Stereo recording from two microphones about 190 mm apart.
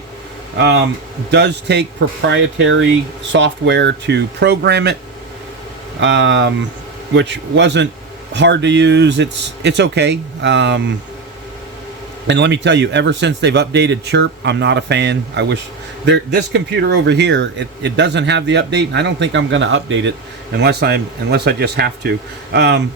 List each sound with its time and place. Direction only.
0.6 s speech: 65° right (ahead or behind)
6.0 s speech: 75° right (ahead or behind)
12.3 s speech: 65° right (ahead or behind)
20.6 s speech: 60° right (ahead or behind)